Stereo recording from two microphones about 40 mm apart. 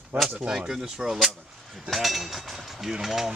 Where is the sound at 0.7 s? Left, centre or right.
Centre.